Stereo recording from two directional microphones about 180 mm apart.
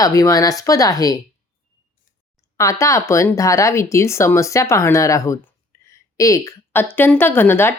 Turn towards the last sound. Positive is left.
turn(degrees=10)  # may be behind; listen again after turning